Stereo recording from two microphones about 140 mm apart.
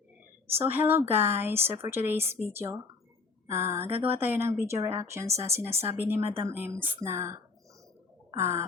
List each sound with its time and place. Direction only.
0.5 s a woman's voice: 15° right (ahead or behind)
8.4 s a woman's voice: 20° right (ahead or behind)